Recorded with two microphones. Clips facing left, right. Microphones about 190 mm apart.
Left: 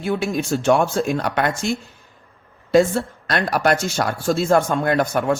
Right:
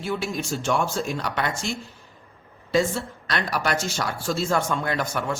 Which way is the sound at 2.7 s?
50° left (ahead or behind).